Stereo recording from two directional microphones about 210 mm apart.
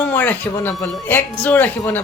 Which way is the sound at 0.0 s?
10° left (ahead or behind).